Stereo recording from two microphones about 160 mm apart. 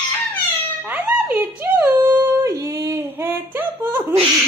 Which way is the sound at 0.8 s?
10° right (ahead or behind).